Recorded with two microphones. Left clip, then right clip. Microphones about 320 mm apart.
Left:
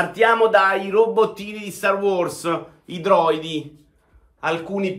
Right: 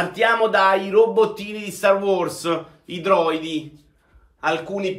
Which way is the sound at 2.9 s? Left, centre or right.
Centre.